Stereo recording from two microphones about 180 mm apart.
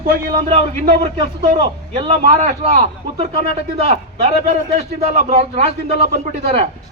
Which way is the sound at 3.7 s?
35° right (ahead or behind).